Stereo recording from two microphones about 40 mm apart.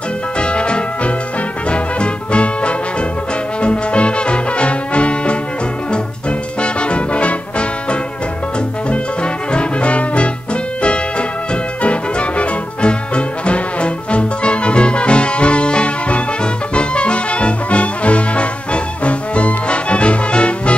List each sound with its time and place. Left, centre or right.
0.4 s music: left
6.6 s music: left
8.8 s brass instrument: left
11.8 s music: left